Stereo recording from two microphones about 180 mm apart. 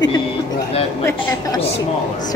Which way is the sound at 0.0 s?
25° left (ahead or behind).